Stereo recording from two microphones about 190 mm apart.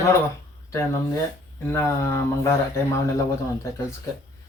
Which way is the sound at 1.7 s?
15° left (ahead or behind).